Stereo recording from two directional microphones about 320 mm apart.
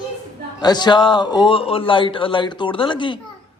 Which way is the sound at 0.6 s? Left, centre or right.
Centre.